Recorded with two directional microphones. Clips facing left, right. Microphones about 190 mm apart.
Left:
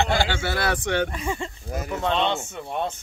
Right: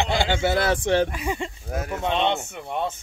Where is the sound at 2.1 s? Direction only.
20° right (ahead or behind).